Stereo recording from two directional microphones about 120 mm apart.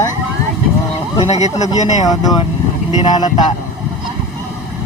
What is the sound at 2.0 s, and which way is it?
Speech, 30° left (ahead or behind).